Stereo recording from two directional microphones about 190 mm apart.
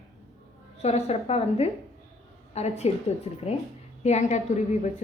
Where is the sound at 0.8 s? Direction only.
35° left (ahead or behind).